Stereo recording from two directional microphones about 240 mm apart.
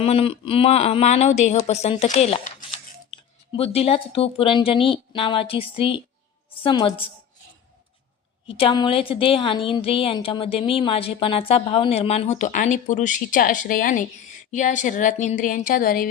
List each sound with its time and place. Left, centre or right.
0.0 s a woman's voice: left
8.4 s a woman's voice: left